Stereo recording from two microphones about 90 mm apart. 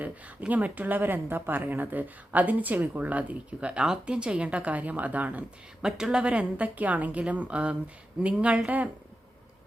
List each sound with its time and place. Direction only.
0.0 s speech: 15° right (ahead or behind)